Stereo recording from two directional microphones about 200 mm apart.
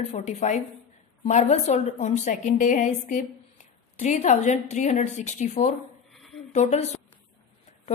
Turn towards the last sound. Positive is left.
turn(degrees=35)  # may be behind; listen again after turning